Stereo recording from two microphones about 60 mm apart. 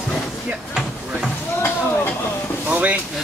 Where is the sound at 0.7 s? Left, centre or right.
Centre.